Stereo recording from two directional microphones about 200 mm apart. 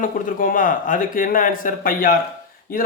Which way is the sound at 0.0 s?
45° left (ahead or behind).